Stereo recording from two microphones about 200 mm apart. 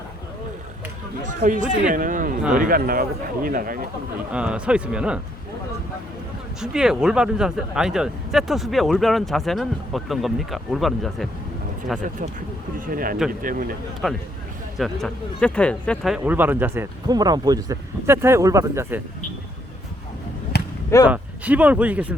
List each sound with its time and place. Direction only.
1.3 s a man's voice: 40° right (ahead or behind)
4.3 s a man's voice: 5° right (ahead or behind)
6.6 s a man's voice: 5° right (ahead or behind)
12.8 s a man's voice: 45° right (ahead or behind)
14.0 s a man's voice: centre (ahead or behind)
20.5 s basketball bounce: 55° left (ahead or behind)
21.1 s speech: 5° right (ahead or behind)